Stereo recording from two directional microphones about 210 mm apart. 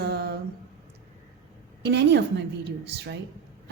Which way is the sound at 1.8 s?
55° right (ahead or behind).